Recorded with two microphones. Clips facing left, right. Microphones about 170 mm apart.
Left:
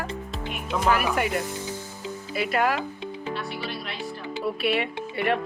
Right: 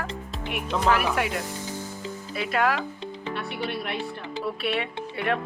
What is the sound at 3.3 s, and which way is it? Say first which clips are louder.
Music: right 2 dB; 60° right (ahead or behind).